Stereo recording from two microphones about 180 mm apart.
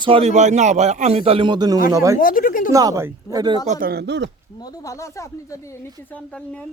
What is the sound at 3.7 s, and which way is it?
Speech, 55° right (ahead or behind).